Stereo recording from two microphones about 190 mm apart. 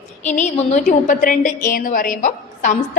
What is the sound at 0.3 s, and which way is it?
A woman's voice, 40° left (ahead or behind).